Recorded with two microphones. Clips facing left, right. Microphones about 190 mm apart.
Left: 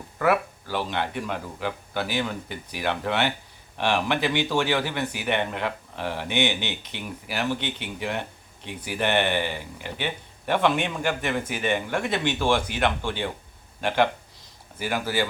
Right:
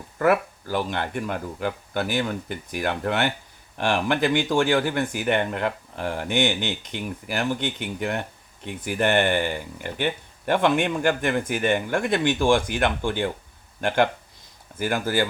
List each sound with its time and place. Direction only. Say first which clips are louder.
0.2 s speech: right 2 dB; 45° right (ahead or behind)